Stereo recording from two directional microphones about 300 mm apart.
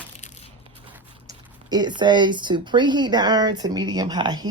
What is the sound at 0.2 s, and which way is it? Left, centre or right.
Crushing, left.